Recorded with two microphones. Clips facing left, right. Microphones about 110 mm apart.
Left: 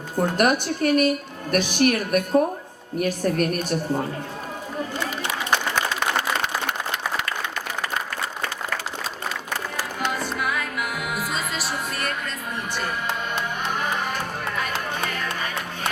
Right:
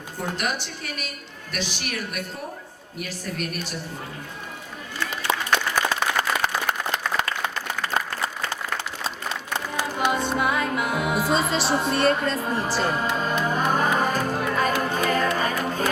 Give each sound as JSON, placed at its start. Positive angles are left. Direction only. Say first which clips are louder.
{"t": 0.2, "sound": "a woman's voice", "louder": "left 8 dB", "side_deg": 50}
{"t": 5.7, "sound": "applause", "louder": "even", "side_deg": -10}
{"t": 9.7, "sound": "music", "louder": "right 5 dB", "side_deg": -20}